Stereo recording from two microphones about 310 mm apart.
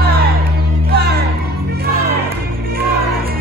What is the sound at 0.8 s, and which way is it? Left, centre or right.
Music, right.